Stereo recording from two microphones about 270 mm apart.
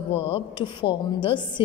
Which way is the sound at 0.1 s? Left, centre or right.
Centre.